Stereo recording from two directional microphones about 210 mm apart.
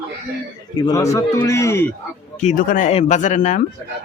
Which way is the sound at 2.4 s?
40° left (ahead or behind).